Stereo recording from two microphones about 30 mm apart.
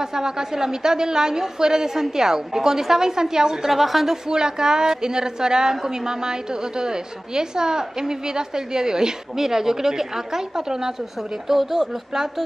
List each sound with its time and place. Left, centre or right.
0.0 s a woman's voice: centre
3.7 s speech: centre
4.3 s a woman's voice: right
11.4 s speech: centre